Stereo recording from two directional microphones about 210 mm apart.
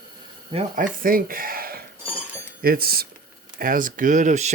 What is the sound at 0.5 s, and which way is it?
Speech, 40° right (ahead or behind).